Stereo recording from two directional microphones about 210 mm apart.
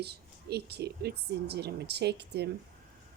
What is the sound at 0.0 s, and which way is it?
A woman's voice, 50° right (ahead or behind).